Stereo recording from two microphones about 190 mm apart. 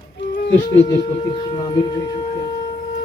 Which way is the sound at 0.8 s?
30° left (ahead or behind).